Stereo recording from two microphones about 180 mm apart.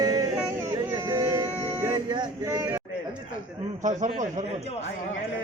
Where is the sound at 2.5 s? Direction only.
15° right (ahead or behind).